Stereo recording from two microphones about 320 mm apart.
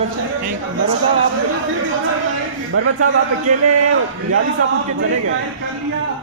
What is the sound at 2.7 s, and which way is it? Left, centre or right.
A man's voice, right.